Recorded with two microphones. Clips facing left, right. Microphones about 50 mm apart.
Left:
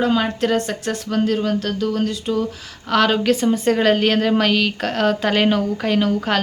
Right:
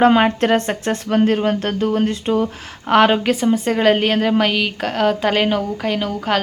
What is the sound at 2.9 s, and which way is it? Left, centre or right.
Speech, right.